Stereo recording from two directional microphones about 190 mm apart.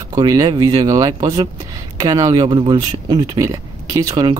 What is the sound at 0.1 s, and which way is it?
Speech, 20° right (ahead or behind).